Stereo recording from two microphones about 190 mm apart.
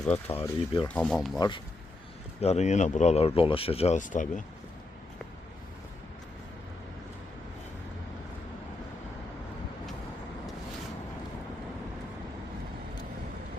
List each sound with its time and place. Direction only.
0.0 s speech: 10° left (ahead or behind)
1.4 s speech: 25° left (ahead or behind)
2.4 s speech: 35° left (ahead or behind)